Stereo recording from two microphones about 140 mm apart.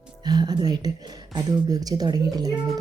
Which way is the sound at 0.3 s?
30° right (ahead or behind).